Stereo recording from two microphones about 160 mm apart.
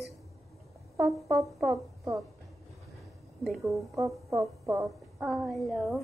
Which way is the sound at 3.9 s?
20° right (ahead or behind).